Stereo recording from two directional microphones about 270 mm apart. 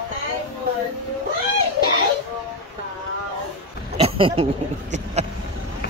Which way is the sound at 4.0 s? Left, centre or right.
Right.